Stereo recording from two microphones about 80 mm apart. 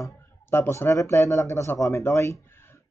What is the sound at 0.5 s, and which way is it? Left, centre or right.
Speech, left.